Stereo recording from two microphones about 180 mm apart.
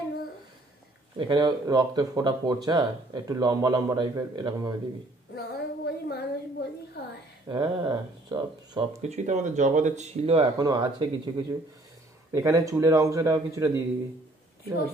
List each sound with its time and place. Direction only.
1.1 s speech: 25° right (ahead or behind)
5.3 s child singing: 60° left (ahead or behind)
7.0 s a sound: 65° left (ahead or behind)
7.4 s speech: 25° right (ahead or behind)
9.0 s speech: 40° right (ahead or behind); by 13.8 s 15° right (ahead or behind)